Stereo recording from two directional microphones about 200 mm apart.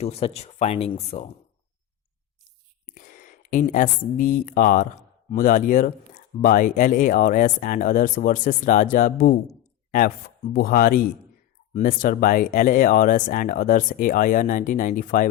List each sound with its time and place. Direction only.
0.0 s speech: 30° left (ahead or behind)
2.9 s speech: 45° left (ahead or behind)